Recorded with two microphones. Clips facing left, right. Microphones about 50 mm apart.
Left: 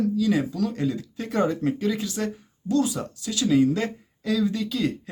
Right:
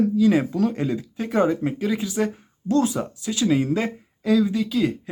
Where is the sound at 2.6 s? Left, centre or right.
Right; by 5.1 s centre.